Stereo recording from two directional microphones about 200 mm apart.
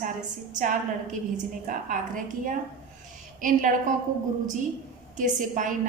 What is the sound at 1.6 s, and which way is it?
A woman's voice, 40° right (ahead or behind).